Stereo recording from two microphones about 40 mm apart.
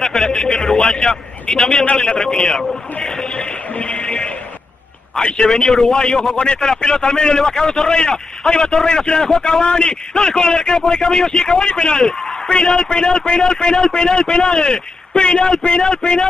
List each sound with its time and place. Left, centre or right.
0.0 s a sound: centre
0.3 s a man's voice: centre
2.4 s a man's voice: centre
3.0 s music: centre
5.4 s a man's voice: centre
6.3 s a man's voice: left
8.8 s a man's voice: centre